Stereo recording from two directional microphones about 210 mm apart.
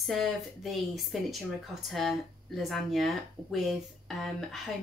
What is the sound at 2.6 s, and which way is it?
Speech, centre (ahead or behind).